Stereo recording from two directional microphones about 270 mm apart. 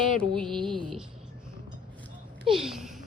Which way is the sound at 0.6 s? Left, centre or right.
Centre.